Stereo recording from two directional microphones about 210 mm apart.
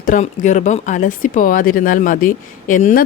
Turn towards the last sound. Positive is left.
turn(degrees=40)  # may be behind; listen again after turning